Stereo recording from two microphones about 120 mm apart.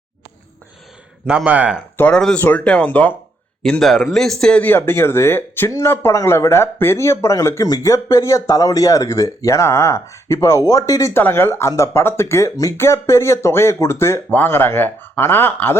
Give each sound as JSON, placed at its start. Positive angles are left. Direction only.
{"t": 1.5, "sound": "speech", "side_deg": -10}
{"t": 2.0, "sound": "speech", "side_deg": 10}
{"t": 11.1, "sound": "speech", "side_deg": 15}